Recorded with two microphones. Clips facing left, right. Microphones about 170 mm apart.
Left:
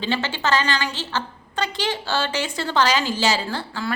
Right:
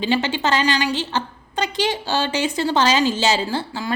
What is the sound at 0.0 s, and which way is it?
A woman's voice, 15° right (ahead or behind).